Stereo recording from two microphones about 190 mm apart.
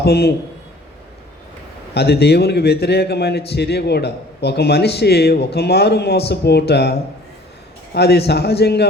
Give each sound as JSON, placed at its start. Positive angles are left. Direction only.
{"t": 0.0, "sound": "a man's voice", "side_deg": 60}
{"t": 1.9, "sound": "a man's voice", "side_deg": 60}
{"t": 7.9, "sound": "a man's voice", "side_deg": 60}